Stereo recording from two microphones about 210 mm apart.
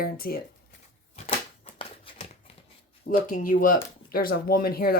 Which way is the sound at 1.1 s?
30° left (ahead or behind).